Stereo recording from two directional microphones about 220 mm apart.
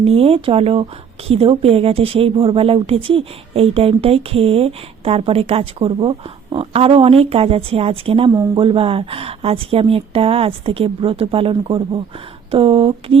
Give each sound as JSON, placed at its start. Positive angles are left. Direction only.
{"t": 0.0, "sound": "a woman's voice", "side_deg": -25}